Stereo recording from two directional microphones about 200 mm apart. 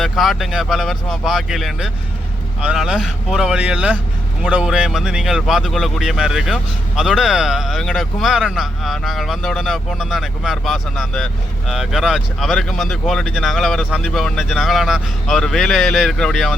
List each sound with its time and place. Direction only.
0.0 s speech: centre (ahead or behind)